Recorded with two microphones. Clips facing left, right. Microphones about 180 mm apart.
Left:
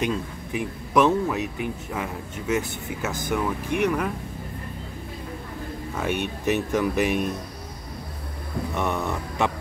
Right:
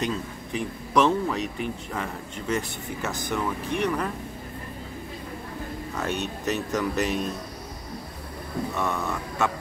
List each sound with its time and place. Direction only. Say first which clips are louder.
0.0 s speech: left 2 dB; 10° left (ahead or behind)
5.9 s speech: left 3 dB; 15° left (ahead or behind)
8.7 s a sound: left 4 dB; 20° left (ahead or behind)